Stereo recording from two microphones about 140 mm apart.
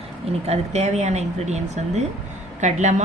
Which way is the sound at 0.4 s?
50° right (ahead or behind).